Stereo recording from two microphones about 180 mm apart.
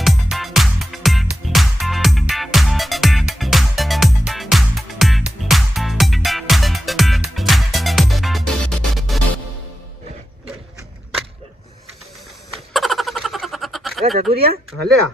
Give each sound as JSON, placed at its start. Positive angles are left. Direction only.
{"t": 0.0, "sound": "music", "side_deg": 0}
{"t": 12.7, "sound": "a sound", "side_deg": 0}
{"t": 14.3, "sound": "speech", "side_deg": -60}